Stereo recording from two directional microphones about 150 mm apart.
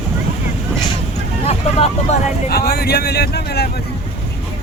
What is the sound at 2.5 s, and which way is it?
Speech, 90° left.